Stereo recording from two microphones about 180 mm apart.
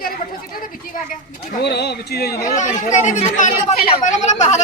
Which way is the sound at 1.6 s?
65° left (ahead or behind).